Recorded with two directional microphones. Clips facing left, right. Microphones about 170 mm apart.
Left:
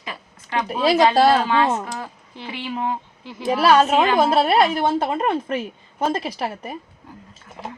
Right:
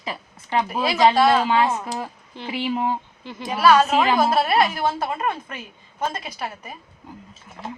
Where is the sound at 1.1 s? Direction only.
35° left (ahead or behind).